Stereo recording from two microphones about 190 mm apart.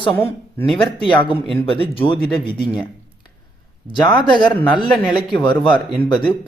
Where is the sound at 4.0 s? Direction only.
25° left (ahead or behind).